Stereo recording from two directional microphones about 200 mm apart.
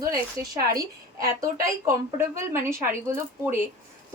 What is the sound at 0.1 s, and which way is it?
A woman's voice, 20° right (ahead or behind).